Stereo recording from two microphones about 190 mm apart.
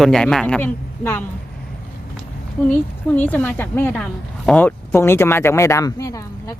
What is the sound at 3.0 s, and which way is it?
A woman's voice, 10° left (ahead or behind).